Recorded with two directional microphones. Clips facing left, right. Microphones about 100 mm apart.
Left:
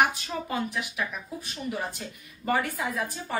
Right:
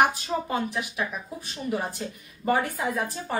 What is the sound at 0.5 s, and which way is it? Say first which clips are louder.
A woman's voice: right 2 dB; 25° right (ahead or behind).